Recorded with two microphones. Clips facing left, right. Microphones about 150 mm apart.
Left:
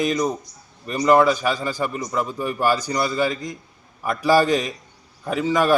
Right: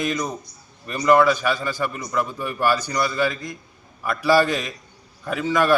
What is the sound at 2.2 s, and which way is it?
Speech, 35° left (ahead or behind).